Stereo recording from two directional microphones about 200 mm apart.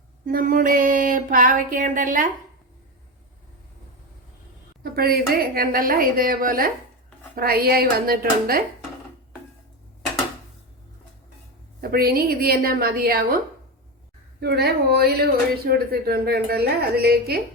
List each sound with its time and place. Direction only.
0.3 s speech: 45° right (ahead or behind)
4.8 s speech: 50° right (ahead or behind)
11.8 s speech: 50° right (ahead or behind)
14.4 s speech: 55° right (ahead or behind)